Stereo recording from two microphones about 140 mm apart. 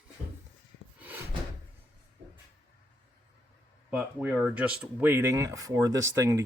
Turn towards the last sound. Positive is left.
turn(degrees=-20)  # may be behind; listen again after turning